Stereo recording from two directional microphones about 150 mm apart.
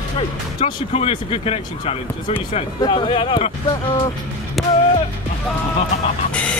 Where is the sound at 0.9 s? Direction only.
40° left (ahead or behind).